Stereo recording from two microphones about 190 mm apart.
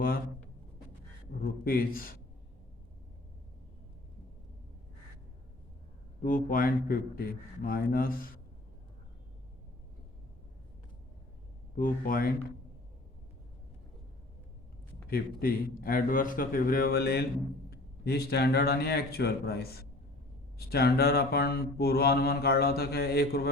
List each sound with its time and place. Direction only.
1.4 s a man's voice: 50° left (ahead or behind)
6.2 s a man's voice: 45° left (ahead or behind)
11.8 s a man's voice: 50° left (ahead or behind)
15.1 s a man's voice: 50° left (ahead or behind)
17.7 s mantra: 55° left (ahead or behind)